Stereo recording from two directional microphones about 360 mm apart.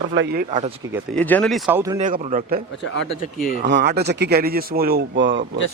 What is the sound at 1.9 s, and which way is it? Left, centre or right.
Speech, centre.